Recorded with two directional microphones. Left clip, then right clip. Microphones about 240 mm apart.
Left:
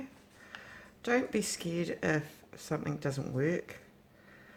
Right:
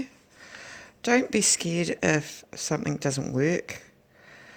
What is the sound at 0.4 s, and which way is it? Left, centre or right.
Speech, right.